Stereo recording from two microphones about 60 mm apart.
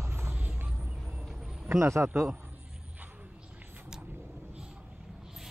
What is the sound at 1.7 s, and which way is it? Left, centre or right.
Speech, right.